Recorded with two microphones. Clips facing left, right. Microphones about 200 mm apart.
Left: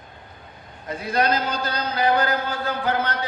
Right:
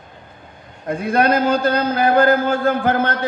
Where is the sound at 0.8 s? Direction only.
50° right (ahead or behind).